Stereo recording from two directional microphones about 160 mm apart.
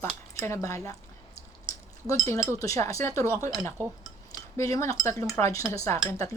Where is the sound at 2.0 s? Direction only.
20° left (ahead or behind).